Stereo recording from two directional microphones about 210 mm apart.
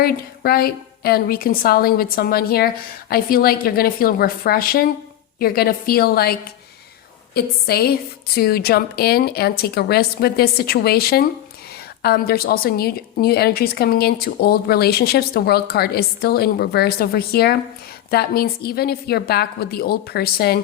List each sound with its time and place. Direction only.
0.0 s a woman's voice: 45° left (ahead or behind)
7.3 s a woman's voice: 50° left (ahead or behind)